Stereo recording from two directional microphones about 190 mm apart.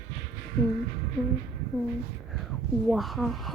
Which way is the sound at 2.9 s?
Centre (ahead or behind).